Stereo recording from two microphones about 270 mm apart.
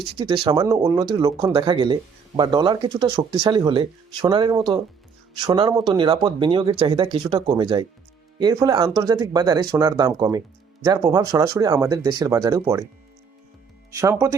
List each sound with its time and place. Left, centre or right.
0.2 s speech: centre
13.9 s speech: centre